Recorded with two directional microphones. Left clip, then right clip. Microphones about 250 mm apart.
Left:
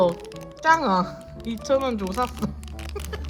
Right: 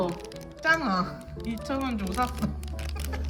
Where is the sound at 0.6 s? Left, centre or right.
Centre.